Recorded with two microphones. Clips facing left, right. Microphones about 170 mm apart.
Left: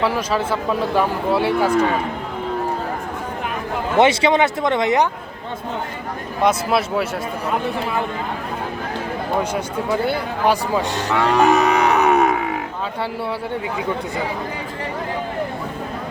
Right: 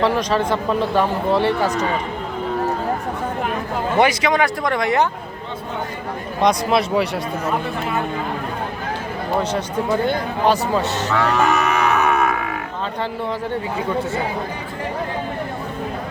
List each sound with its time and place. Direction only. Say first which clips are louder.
0.0 s speech: right 2 dB; 5° left (ahead or behind)
3.9 s speech: left 2 dB; 25° left (ahead or behind)
6.4 s speech: right 1 dB; 5° left (ahead or behind)
9.4 s speech: right 1 dB; 10° left (ahead or behind)